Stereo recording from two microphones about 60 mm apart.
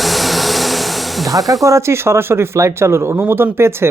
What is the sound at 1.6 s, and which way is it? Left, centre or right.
Speech, right.